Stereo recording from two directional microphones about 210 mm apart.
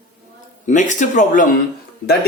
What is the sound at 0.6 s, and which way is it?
Speech, 35° left (ahead or behind).